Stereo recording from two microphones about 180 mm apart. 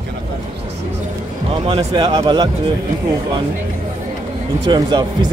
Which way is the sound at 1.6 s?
30° right (ahead or behind).